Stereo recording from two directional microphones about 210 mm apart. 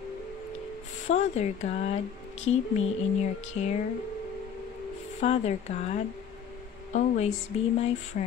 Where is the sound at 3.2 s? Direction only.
35° left (ahead or behind).